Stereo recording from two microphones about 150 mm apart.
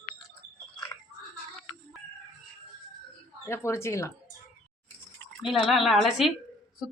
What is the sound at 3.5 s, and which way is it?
Speech, 20° left (ahead or behind).